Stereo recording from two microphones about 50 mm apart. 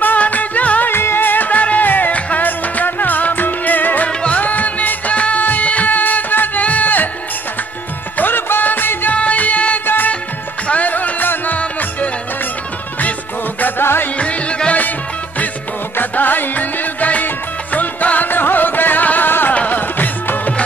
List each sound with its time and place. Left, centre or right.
0.0 s music: left
0.9 s music: left
8.2 s music: left
9.8 s music: left
13.6 s music: left
14.1 s music: left
16.0 s music: left